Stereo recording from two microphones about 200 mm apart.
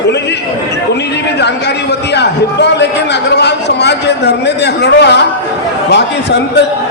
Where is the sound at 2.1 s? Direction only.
60° left (ahead or behind).